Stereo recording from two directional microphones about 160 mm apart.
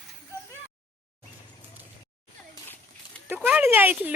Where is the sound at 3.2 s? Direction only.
10° right (ahead or behind).